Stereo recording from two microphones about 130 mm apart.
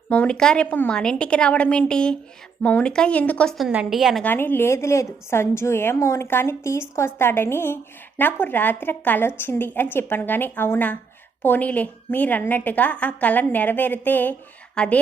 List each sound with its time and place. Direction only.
0.1 s a woman's voice: 10° left (ahead or behind)
3.7 s a woman's voice: 5° right (ahead or behind)
4.2 s a woman's voice: 15° left (ahead or behind)